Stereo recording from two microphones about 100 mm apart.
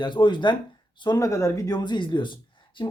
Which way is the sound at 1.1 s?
30° left (ahead or behind).